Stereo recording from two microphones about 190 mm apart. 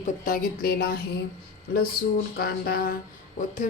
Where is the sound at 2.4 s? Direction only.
50° left (ahead or behind).